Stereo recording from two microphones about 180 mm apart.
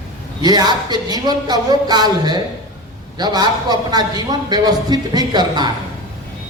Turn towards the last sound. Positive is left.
turn(degrees=-25)  # may be behind; listen again after turning